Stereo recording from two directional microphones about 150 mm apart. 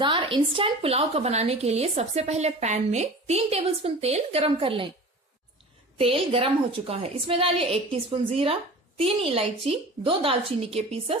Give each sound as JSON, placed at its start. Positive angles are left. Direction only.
{"t": 0.0, "sound": "a woman's voice", "side_deg": -30}
{"t": 6.0, "sound": "a woman's voice", "side_deg": -40}